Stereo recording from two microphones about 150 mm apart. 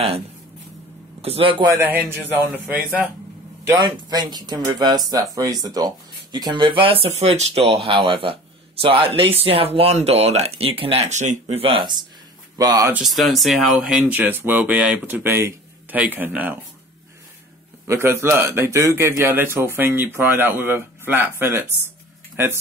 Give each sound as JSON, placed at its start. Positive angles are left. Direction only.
{"t": 1.2, "sound": "speech", "side_deg": -40}
{"t": 1.7, "sound": "a man's voice", "side_deg": -15}
{"t": 2.6, "sound": "speech", "side_deg": 0}
{"t": 3.7, "sound": "speech", "side_deg": -30}
{"t": 12.5, "sound": "speech", "side_deg": -20}
{"t": 12.9, "sound": "a man's voice", "side_deg": 0}
{"t": 17.8, "sound": "a man's voice", "side_deg": -20}